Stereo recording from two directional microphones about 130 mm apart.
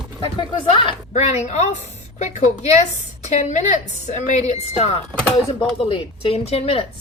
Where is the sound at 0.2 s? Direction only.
40° left (ahead or behind).